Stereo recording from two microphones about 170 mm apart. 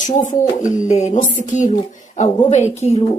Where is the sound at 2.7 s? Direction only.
40° left (ahead or behind).